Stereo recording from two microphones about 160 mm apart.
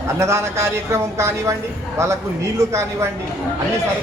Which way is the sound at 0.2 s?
15° right (ahead or behind).